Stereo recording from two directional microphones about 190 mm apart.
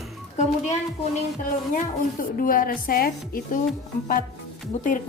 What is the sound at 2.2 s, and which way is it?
A woman's voice, 50° left (ahead or behind).